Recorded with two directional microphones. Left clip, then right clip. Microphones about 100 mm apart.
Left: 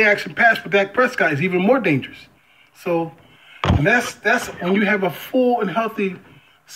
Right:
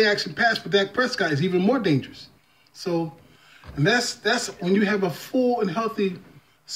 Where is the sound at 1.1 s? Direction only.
25° right (ahead or behind).